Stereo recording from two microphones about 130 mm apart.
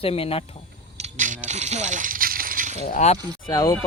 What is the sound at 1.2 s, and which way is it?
Coin, 70° right (ahead or behind).